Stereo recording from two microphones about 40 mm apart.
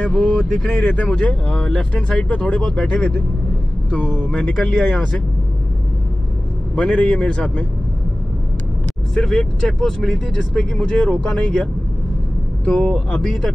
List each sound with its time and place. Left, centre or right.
0.1 s speech: left
0.4 s speech: centre
0.7 s speech: left
1.5 s speech: centre
2.6 s speech: centre
3.9 s speech: left
6.8 s speech: left
9.1 s speech: centre